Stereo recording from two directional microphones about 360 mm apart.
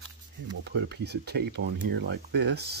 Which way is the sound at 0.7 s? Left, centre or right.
Right.